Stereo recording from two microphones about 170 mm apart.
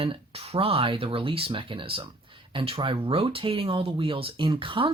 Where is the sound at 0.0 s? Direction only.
35° right (ahead or behind).